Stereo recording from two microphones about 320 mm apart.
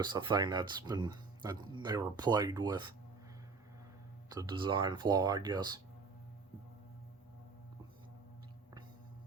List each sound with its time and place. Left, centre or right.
0.0 s speech: centre
4.3 s speech: centre